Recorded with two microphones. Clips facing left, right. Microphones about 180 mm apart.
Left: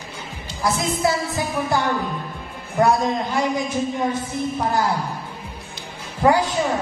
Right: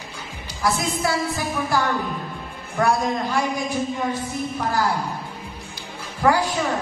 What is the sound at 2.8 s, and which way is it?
Speech, 20° left (ahead or behind).